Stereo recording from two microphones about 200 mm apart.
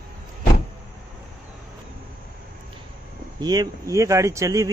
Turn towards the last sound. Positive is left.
turn(degrees=-15)  # may be behind; listen again after turning